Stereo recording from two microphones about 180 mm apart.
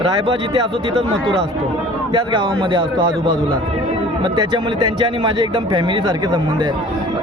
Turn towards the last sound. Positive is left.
turn(degrees=-25)  # may be behind; listen again after turning